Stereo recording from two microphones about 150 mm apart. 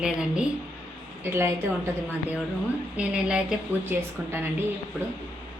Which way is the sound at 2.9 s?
5° right (ahead or behind).